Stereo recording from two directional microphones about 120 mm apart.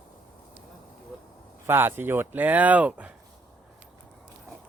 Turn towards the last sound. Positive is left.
turn(degrees=-15)  # may be behind; listen again after turning